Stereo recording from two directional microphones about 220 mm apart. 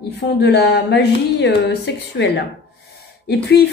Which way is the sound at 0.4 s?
50° left (ahead or behind).